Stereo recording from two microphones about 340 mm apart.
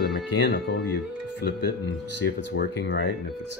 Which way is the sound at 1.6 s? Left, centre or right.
Left.